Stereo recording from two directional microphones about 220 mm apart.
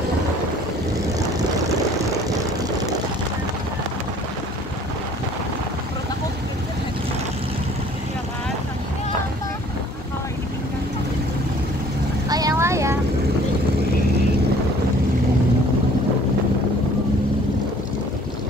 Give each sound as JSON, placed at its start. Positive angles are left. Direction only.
{"t": 12.3, "sound": "vehicle", "side_deg": -15}